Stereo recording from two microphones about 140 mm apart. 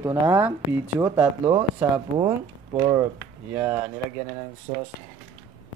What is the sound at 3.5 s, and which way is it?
Speech, 15° right (ahead or behind).